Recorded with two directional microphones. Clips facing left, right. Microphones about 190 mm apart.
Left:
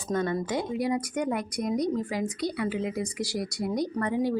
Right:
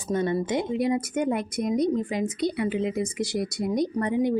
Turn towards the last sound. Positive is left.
turn(degrees=-20)  # may be behind; listen again after turning